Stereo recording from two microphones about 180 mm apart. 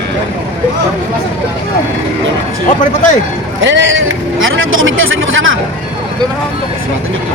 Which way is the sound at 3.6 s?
85° right.